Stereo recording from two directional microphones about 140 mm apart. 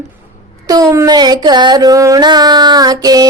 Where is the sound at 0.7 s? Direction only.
25° right (ahead or behind).